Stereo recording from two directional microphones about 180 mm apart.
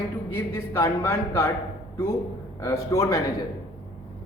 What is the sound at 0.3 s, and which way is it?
A woman's voice, 10° left (ahead or behind).